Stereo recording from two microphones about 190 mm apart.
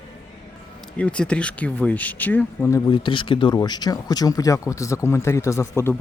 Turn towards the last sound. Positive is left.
turn(degrees=15)  # may be behind; listen again after turning